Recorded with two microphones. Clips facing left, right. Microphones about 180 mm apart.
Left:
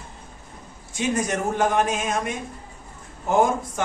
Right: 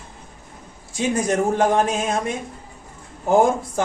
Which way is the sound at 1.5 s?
30° right (ahead or behind).